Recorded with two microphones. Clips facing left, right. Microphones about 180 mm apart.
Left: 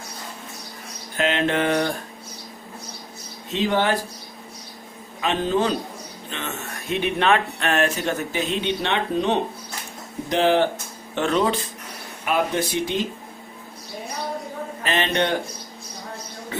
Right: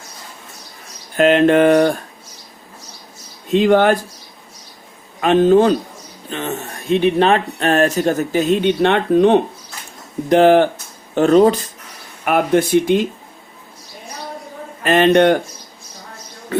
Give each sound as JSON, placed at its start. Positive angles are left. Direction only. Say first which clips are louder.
{"t": 1.1, "sound": "speech", "louder": "right 10 dB", "side_deg": -50}
{"t": 3.5, "sound": "speech", "louder": "right 9 dB", "side_deg": -55}
{"t": 5.2, "sound": "speech", "louder": "right 10 dB", "side_deg": -50}
{"t": 6.3, "sound": "speech", "louder": "right 8 dB", "side_deg": -35}
{"t": 11.1, "sound": "speech", "louder": "right 10 dB", "side_deg": -40}
{"t": 12.2, "sound": "speech", "louder": "right 7 dB", "side_deg": -55}
{"t": 14.8, "sound": "speech", "louder": "right 11 dB", "side_deg": -50}